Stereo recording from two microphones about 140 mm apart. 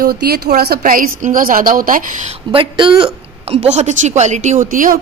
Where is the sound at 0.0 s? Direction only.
90° right; by 2.3 s 70° right (ahead or behind).